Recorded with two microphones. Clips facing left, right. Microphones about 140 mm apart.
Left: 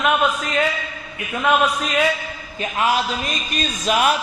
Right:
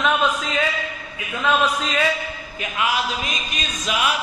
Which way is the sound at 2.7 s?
40° left (ahead or behind).